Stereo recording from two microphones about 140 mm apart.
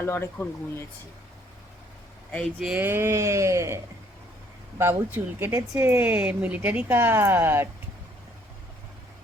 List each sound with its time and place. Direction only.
0.0 s speech: 15° left (ahead or behind)
2.6 s speech: 5° right (ahead or behind)
2.8 s a sound: 15° right (ahead or behind)
4.8 s speech: 15° right (ahead or behind)